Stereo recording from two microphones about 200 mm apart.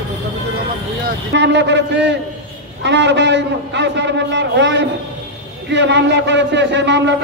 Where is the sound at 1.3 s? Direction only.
65° right (ahead or behind).